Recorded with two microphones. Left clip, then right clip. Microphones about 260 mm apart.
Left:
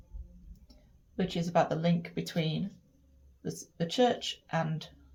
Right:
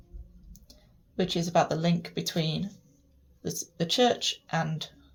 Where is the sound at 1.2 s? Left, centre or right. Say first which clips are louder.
Right 3 dB; right.